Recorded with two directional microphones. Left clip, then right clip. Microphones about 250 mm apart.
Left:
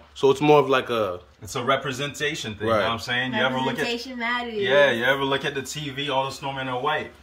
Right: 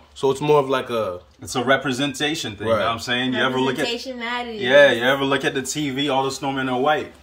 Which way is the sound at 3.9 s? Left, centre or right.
Centre.